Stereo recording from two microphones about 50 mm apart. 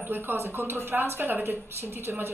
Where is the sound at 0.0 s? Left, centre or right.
Right.